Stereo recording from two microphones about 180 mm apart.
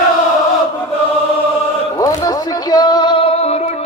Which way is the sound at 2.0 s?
20° left (ahead or behind).